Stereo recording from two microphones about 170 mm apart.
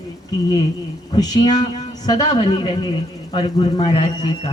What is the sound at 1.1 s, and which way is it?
A man's voice, 25° left (ahead or behind).